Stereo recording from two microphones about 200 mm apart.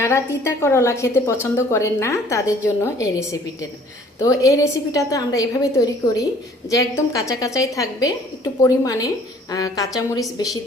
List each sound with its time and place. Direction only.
0.0 s a woman's voice: 15° left (ahead or behind)